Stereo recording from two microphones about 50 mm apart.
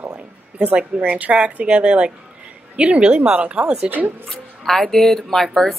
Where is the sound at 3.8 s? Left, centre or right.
Right.